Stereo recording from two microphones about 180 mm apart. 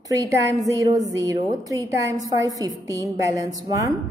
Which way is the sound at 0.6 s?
20° right (ahead or behind).